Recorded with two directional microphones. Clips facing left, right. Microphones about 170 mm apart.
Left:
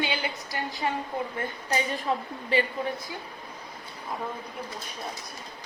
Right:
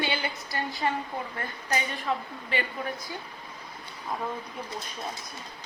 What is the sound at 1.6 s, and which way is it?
A woman's voice, 35° left (ahead or behind).